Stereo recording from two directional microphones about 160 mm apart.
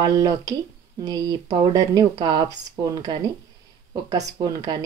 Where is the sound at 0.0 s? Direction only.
25° right (ahead or behind).